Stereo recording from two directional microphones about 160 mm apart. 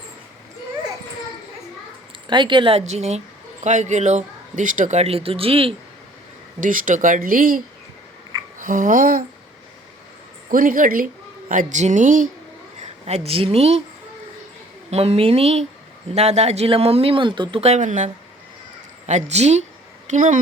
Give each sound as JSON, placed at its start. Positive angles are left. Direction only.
{"t": 2.2, "sound": "speech", "side_deg": -30}
{"t": 6.6, "sound": "speech", "side_deg": -55}
{"t": 8.5, "sound": "a sound", "side_deg": -55}
{"t": 10.5, "sound": "speech", "side_deg": -60}
{"t": 12.8, "sound": "speech", "side_deg": -40}
{"t": 14.8, "sound": "speech", "side_deg": -40}